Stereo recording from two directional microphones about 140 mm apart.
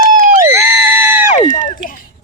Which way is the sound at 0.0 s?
75° right (ahead or behind).